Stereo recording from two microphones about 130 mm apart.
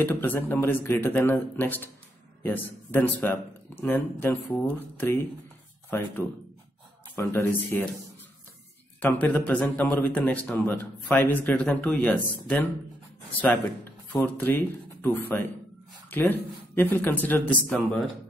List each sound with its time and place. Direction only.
0.0 s speech: 15° left (ahead or behind)
9.0 s speech: 10° left (ahead or behind)
14.1 s speech: 15° left (ahead or behind)